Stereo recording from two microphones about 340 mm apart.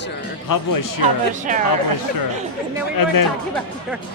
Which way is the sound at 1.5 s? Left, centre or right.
Right.